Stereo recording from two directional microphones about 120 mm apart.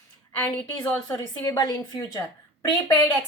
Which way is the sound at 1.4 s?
35° left (ahead or behind).